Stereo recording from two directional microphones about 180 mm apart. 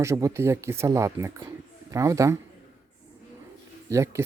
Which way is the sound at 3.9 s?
15° right (ahead or behind).